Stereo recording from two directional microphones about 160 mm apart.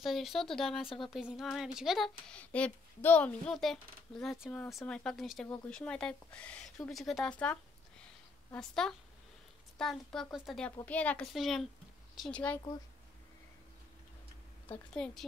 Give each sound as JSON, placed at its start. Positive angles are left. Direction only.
{"t": 0.0, "sound": "speech", "side_deg": 0}
{"t": 0.8, "sound": "speech", "side_deg": 30}
{"t": 1.1, "sound": "speech", "side_deg": -5}
{"t": 8.5, "sound": "speech", "side_deg": 5}
{"t": 14.7, "sound": "speech", "side_deg": 5}